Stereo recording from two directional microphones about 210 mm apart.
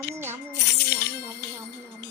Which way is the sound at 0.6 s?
50° left (ahead or behind).